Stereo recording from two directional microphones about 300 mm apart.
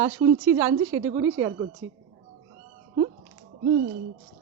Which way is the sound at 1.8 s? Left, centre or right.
Right.